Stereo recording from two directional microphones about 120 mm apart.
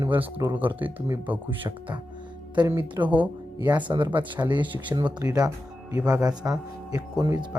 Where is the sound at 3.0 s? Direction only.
30° right (ahead or behind).